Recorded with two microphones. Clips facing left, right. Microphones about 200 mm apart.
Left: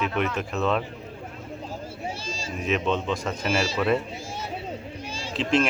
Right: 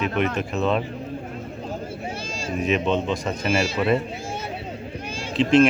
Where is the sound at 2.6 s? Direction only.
Centre (ahead or behind).